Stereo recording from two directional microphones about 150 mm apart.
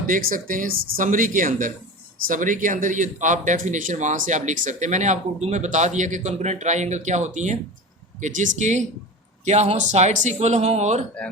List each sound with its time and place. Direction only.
0.1 s a man's voice: 65° right (ahead or behind); by 11.0 s 50° right (ahead or behind)